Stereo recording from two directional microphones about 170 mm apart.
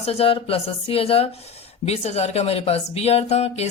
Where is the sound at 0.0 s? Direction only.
35° left (ahead or behind).